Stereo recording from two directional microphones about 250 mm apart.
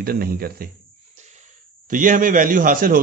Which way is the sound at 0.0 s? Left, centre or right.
Right.